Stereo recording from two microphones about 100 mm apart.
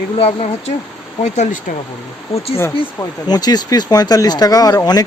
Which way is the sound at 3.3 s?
45° left (ahead or behind).